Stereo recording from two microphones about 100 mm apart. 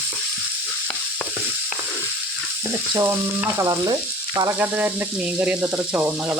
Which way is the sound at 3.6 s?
40° right (ahead or behind).